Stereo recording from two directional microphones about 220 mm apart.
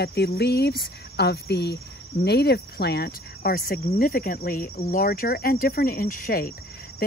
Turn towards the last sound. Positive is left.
turn(degrees=40)  # may be behind; listen again after turning